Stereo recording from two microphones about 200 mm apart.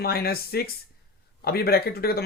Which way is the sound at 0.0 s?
50° left (ahead or behind).